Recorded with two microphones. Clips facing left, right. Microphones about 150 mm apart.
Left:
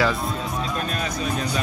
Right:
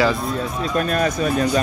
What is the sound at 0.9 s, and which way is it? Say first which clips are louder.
Speech: right 7 dB; 50° right (ahead or behind).